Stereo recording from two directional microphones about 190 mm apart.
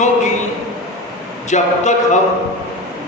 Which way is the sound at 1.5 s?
40° left (ahead or behind).